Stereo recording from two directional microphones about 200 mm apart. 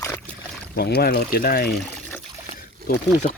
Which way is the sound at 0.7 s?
55° left (ahead or behind).